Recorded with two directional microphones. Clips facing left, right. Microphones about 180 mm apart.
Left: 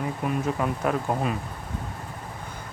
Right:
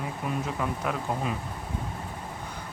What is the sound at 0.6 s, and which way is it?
Speech, 50° left (ahead or behind).